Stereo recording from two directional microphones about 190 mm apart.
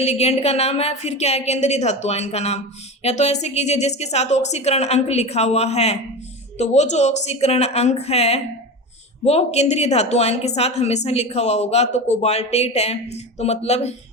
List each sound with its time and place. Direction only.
0.0 s a woman's voice: 30° left (ahead or behind)